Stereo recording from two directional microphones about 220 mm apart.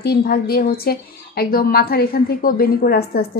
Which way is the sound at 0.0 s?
45° left (ahead or behind).